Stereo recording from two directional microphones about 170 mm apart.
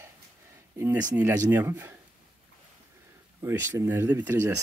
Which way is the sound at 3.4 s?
15° right (ahead or behind).